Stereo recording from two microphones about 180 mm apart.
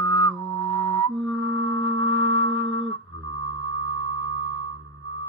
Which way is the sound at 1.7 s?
10° left (ahead or behind).